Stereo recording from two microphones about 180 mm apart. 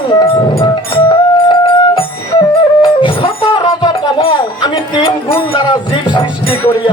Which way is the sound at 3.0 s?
30° left (ahead or behind).